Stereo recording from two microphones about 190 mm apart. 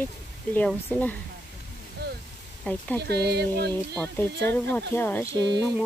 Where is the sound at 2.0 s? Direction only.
60° right (ahead or behind).